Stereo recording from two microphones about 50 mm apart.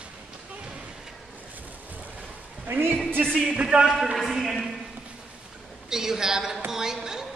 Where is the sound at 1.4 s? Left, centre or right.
Right.